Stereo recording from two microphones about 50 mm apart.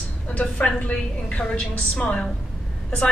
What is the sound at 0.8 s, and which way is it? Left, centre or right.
A woman's voice, left.